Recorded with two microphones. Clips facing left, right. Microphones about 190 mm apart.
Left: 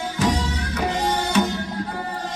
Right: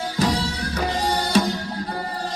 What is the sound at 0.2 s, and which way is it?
Music, 35° right (ahead or behind).